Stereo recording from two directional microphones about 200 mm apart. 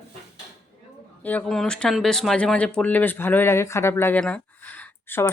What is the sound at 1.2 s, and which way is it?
Speech, 10° left (ahead or behind).